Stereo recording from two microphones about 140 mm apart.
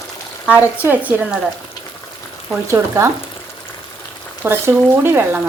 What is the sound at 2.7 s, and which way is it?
Speech, 20° right (ahead or behind).